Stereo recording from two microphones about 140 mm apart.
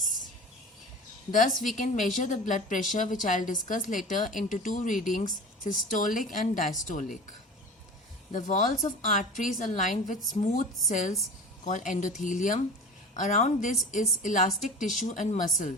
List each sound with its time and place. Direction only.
1.3 s a woman's voice: 65° left (ahead or behind)
8.3 s a woman's voice: 65° left (ahead or behind)